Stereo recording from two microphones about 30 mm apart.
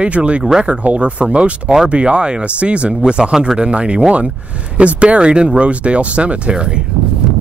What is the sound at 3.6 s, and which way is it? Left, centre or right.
Speech, right.